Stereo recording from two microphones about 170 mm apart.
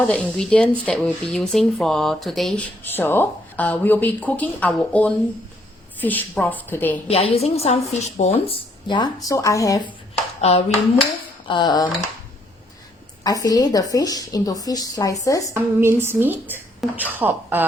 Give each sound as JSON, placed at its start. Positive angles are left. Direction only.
{"t": 0.1, "sound": "speech", "side_deg": 5}
{"t": 7.1, "sound": "a woman's voice", "side_deg": 35}
{"t": 11.4, "sound": "a woman's voice", "side_deg": 25}
{"t": 13.2, "sound": "a woman's voice", "side_deg": 20}
{"t": 15.5, "sound": "a woman's voice", "side_deg": -15}